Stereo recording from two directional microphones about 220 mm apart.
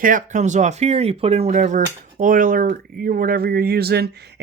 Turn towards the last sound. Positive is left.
turn(degrees=-45)  # may be behind; listen again after turning